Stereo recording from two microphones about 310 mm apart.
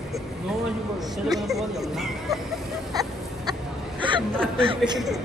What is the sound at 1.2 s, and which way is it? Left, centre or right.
Speech, centre.